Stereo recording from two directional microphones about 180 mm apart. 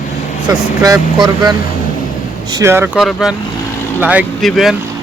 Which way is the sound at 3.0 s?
Centre (ahead or behind).